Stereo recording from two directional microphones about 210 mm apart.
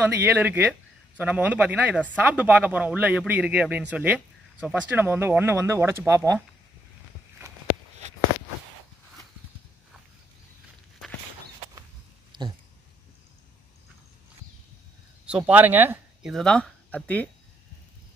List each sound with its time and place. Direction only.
0.0 s a man's voice: 10° right (ahead or behind)
12.3 s a sound: 20° right (ahead or behind)
15.2 s speech: 5° right (ahead or behind)